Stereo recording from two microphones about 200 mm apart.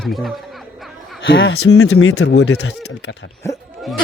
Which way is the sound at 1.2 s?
70° left (ahead or behind).